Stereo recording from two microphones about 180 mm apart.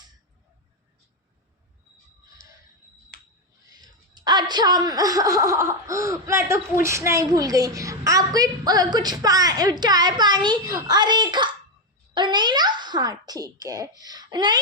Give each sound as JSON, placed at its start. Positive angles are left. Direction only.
{"t": 3.7, "sound": "a woman's voice", "side_deg": -20}